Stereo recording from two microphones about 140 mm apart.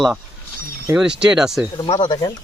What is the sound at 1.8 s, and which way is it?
Speech, 35° left (ahead or behind).